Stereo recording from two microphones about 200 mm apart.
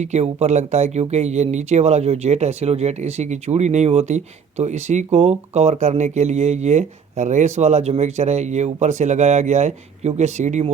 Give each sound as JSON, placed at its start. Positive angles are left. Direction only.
{"t": 0.0, "sound": "speech", "side_deg": -35}